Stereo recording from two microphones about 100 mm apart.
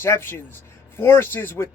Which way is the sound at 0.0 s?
20° left (ahead or behind).